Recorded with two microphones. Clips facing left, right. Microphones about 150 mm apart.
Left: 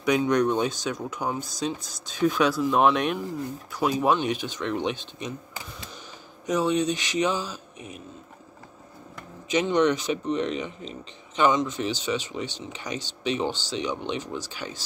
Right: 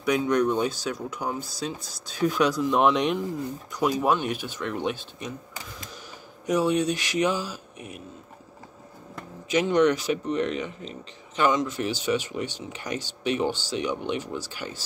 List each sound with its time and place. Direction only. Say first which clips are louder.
0.0 s speech: left 1 dB; 5° right (ahead or behind)
6.4 s speech: right 1 dB; 10° right (ahead or behind)
9.5 s speech: right 1 dB; 5° right (ahead or behind)